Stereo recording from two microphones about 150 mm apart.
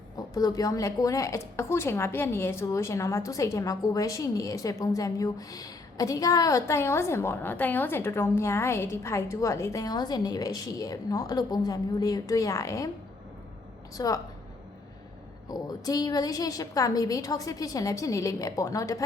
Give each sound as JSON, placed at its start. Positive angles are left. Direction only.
{"t": 0.2, "sound": "speech", "side_deg": 25}
{"t": 13.9, "sound": "speech", "side_deg": 25}
{"t": 15.4, "sound": "speech", "side_deg": 25}